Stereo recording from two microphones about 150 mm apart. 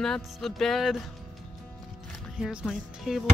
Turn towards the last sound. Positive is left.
turn(degrees=0)  # may be behind; listen again after turning